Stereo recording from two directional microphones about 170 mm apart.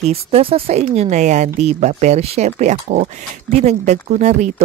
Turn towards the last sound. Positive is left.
turn(degrees=-45)  # may be behind; listen again after turning